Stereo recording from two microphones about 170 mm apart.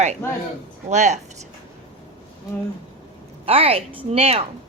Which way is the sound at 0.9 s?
45° right (ahead or behind).